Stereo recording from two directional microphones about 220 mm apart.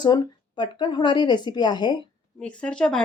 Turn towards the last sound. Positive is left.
turn(degrees=5)  # may be behind; listen again after turning